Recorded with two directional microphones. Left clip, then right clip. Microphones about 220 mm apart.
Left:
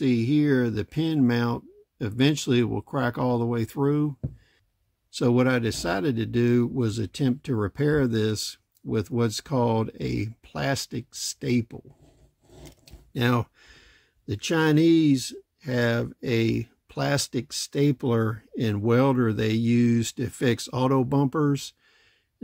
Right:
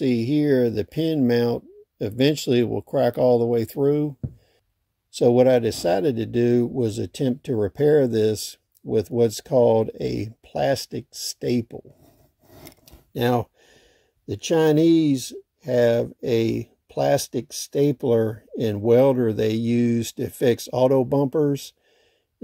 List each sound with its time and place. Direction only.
0.0 s speech: centre (ahead or behind)
5.3 s speech: 5° left (ahead or behind)
10.6 s speech: 40° left (ahead or behind)
11.3 s speech: 5° left (ahead or behind)
13.4 s speech: 10° left (ahead or behind)